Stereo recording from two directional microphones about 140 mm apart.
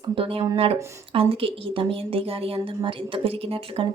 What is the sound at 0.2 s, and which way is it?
A woman's voice, 40° right (ahead or behind).